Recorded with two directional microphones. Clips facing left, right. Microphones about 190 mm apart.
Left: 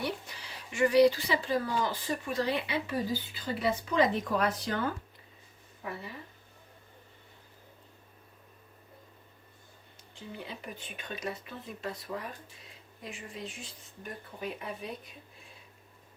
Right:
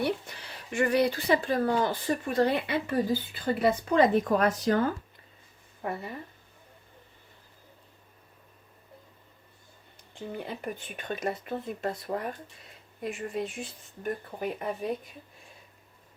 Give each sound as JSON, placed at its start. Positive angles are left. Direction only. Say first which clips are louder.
{"t": 0.0, "sound": "speech", "louder": "right 6 dB", "side_deg": -55}
{"t": 5.8, "sound": "speech", "louder": "right 6 dB", "side_deg": -50}
{"t": 10.2, "sound": "speech", "louder": "right 6 dB", "side_deg": -55}